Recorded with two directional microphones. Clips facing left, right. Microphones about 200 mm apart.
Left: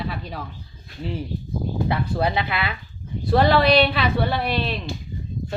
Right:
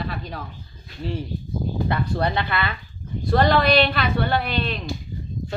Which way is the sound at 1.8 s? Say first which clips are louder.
Left 1 dB; 5° left (ahead or behind).